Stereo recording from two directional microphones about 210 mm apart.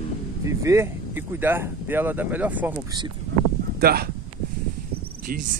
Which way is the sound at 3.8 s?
45° right (ahead or behind).